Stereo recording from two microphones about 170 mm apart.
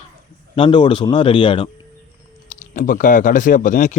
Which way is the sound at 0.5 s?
30° left (ahead or behind).